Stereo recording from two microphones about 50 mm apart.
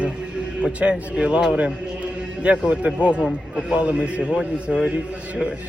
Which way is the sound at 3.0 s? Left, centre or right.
Right.